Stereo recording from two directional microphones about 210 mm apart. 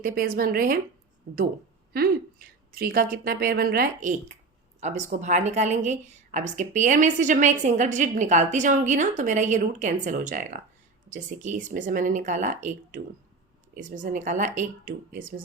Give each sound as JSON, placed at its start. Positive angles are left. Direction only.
{"t": 0.0, "sound": "a woman's voice", "side_deg": -45}
{"t": 1.9, "sound": "a woman's voice", "side_deg": -45}